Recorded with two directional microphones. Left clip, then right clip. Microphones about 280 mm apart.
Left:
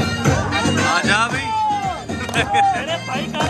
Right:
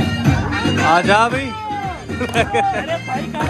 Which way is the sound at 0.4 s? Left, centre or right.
Left.